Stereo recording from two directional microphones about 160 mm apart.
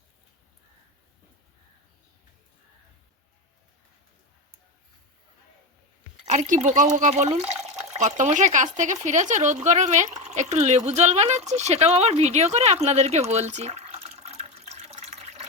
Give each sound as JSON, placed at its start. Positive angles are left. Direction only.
{"t": 6.2, "sound": "speech", "side_deg": -45}